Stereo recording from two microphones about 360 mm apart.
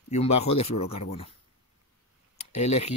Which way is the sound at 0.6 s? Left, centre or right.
Centre.